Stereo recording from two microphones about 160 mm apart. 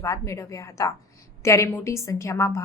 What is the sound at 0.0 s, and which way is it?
A woman's voice, 20° left (ahead or behind).